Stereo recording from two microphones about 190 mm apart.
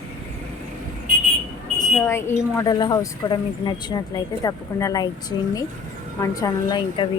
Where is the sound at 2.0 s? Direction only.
15° left (ahead or behind).